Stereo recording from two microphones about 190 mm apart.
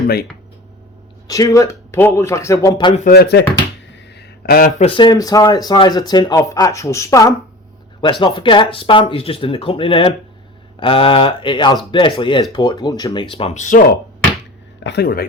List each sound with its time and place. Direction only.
1.3 s speech: 15° left (ahead or behind)
3.0 s speech: 55° left (ahead or behind)
3.9 s a sound: 60° left (ahead or behind)
4.8 s speech: 25° left (ahead or behind)
13.3 s speech: 35° left (ahead or behind)
14.8 s speech: 55° left (ahead or behind)